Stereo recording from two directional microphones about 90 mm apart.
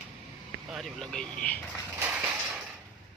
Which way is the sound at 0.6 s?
Centre (ahead or behind).